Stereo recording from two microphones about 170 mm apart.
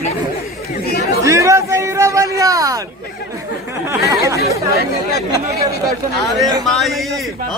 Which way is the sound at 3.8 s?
15° right (ahead or behind).